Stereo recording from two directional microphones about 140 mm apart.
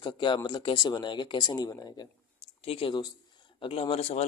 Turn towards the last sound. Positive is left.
turn(degrees=50)  # may be behind; listen again after turning